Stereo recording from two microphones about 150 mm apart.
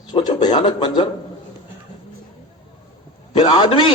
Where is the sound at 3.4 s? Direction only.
35° left (ahead or behind).